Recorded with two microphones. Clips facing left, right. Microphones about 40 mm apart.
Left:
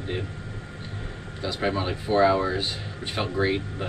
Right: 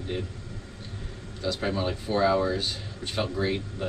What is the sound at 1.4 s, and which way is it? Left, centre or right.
Speech, left.